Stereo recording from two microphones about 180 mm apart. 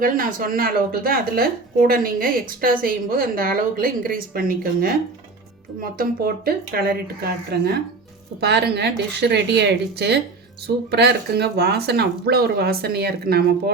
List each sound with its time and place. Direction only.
0.0 s a woman's voice: 50° right (ahead or behind)